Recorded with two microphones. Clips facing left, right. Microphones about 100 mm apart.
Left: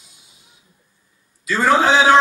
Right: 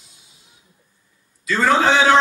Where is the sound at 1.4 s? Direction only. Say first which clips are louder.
Left 1 dB; 10° left (ahead or behind).